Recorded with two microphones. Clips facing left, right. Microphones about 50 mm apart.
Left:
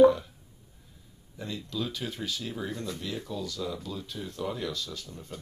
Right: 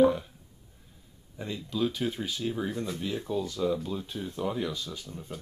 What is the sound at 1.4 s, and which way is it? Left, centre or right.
Speech, centre.